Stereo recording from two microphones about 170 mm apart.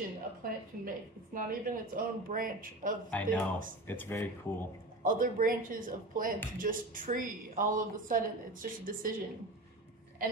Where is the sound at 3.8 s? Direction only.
10° left (ahead or behind).